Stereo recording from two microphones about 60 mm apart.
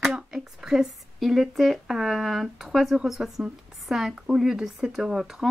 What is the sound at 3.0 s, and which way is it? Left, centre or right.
Speech, centre.